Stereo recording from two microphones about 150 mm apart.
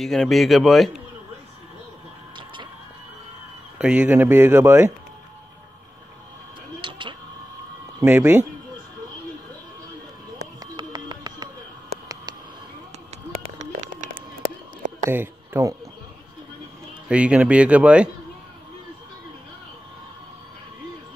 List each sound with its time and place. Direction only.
0.0 s speech: centre (ahead or behind)
2.3 s a sound: 30° right (ahead or behind)
3.7 s speech: 10° right (ahead or behind)
6.8 s vehicle: 30° right (ahead or behind)
8.0 s speech: 15° right (ahead or behind)
10.6 s a sound: 30° right (ahead or behind)
13.6 s a sound: 55° right (ahead or behind)
15.0 s speech: 15° right (ahead or behind)
17.1 s speech: 10° right (ahead or behind)